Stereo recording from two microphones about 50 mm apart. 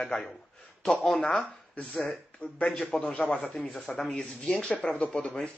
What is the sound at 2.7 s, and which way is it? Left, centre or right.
Speech, centre.